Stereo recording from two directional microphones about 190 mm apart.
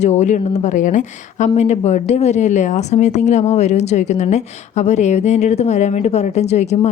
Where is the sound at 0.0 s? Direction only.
35° left (ahead or behind).